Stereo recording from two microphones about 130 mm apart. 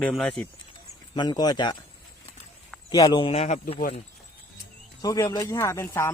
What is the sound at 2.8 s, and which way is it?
Speech, 35° left (ahead or behind).